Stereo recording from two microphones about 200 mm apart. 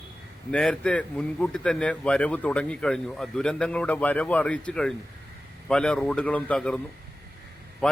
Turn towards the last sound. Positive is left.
turn(degrees=5)  # may be behind; listen again after turning